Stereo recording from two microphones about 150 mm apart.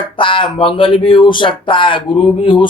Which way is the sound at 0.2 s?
35° left (ahead or behind).